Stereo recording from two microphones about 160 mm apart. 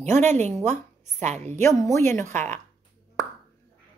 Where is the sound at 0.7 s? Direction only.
45° right (ahead or behind).